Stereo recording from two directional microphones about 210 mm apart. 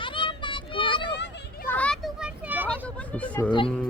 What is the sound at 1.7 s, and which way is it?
Children playing, 5° left (ahead or behind).